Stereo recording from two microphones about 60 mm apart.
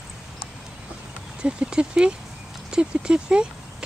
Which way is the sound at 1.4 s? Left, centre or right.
Centre.